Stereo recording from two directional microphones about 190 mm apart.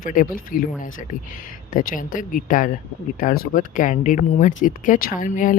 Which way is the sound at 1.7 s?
45° left (ahead or behind).